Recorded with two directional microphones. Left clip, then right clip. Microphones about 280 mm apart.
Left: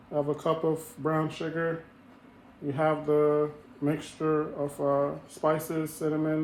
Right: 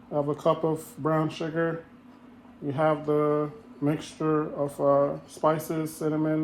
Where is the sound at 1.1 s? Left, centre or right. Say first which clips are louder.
Right 3 dB; centre.